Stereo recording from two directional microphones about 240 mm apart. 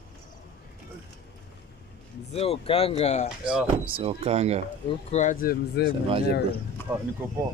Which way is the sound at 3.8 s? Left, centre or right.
Right.